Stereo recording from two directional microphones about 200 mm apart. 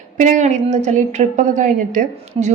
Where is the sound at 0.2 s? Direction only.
40° right (ahead or behind).